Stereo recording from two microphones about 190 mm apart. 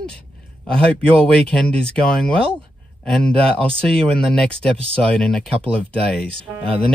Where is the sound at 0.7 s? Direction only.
5° left (ahead or behind).